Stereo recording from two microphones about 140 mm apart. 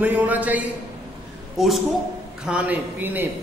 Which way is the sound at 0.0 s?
10° right (ahead or behind).